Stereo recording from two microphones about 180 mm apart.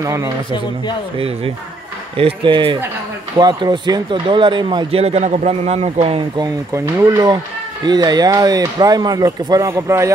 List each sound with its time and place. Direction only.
0.0 s speech: 15° right (ahead or behind)
1.1 s speech: 30° right (ahead or behind)
6.4 s speech: 15° right (ahead or behind)